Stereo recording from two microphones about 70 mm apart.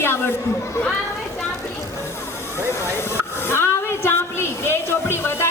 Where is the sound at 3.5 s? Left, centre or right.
Left.